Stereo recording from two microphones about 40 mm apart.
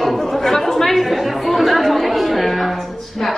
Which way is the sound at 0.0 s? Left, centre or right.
Centre.